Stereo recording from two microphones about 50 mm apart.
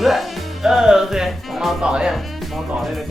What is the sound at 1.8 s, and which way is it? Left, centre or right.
Speech, centre.